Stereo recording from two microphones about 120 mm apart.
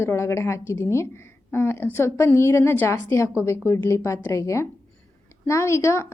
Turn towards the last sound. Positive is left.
turn(degrees=25)  # may be behind; listen again after turning